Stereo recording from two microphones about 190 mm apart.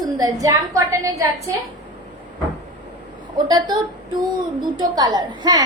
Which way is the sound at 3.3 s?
20° right (ahead or behind).